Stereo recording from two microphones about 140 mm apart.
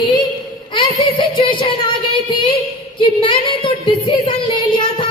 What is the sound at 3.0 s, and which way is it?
Speech, 35° left (ahead or behind).